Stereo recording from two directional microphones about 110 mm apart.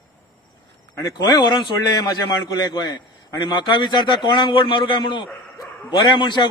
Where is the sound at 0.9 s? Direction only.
35° left (ahead or behind).